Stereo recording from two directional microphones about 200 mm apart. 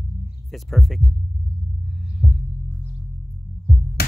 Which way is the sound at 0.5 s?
Centre (ahead or behind).